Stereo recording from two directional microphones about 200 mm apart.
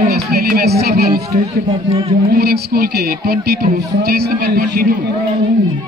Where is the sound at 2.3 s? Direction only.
50° right (ahead or behind).